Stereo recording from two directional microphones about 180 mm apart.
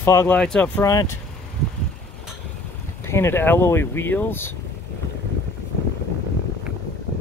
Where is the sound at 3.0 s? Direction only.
15° left (ahead or behind).